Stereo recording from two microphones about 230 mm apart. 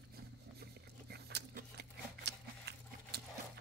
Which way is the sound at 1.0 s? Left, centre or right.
Right.